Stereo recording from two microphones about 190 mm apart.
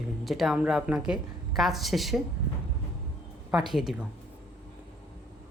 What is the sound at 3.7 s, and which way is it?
Speech, centre (ahead or behind).